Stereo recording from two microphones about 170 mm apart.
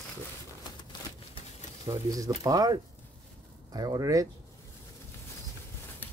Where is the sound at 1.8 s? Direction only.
20° right (ahead or behind).